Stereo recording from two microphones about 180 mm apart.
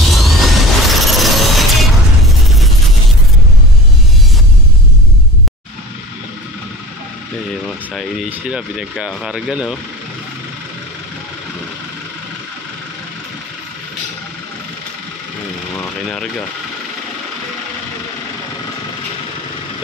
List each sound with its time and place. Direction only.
0.0 s music: centre (ahead or behind)
7.6 s a sound: centre (ahead or behind)
8.3 s speech: 5° right (ahead or behind)
16.1 s speech: 5° left (ahead or behind)